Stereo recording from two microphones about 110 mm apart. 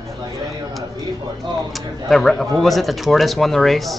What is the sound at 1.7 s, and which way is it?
Speech, centre (ahead or behind).